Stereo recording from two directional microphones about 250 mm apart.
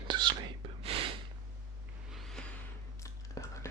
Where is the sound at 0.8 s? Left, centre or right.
Right.